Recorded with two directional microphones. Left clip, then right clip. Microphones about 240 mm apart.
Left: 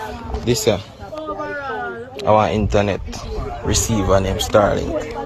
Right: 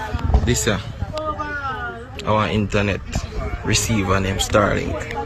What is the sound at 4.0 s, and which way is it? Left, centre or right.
Speech, centre.